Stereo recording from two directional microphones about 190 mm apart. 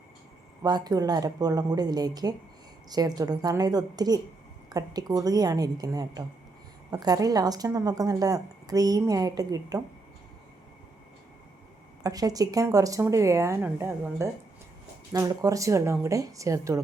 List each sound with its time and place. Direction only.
0.6 s a woman's voice: 20° right (ahead or behind)
12.0 s speech: 20° right (ahead or behind)